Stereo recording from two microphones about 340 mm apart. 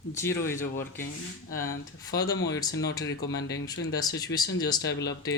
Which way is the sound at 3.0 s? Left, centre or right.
Left.